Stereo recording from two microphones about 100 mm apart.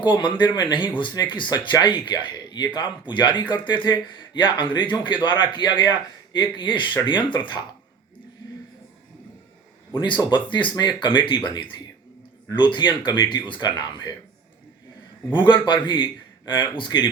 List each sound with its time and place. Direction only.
0.0 s a man's voice: 50° left (ahead or behind)
10.0 s a man's voice: 50° left (ahead or behind)
12.5 s a man's voice: 50° left (ahead or behind)
15.4 s a man's voice: 50° left (ahead or behind)